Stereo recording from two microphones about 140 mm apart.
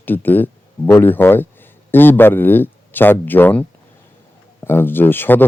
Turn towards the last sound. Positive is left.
turn(degrees=15)  # may be behind; listen again after turning